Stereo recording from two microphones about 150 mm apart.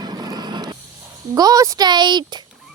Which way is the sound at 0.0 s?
25° right (ahead or behind).